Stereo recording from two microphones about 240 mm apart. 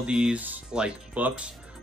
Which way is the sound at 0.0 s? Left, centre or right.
Centre.